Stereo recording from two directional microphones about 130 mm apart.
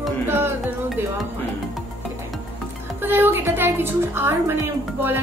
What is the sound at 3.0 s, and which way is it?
A woman's voice, 15° right (ahead or behind).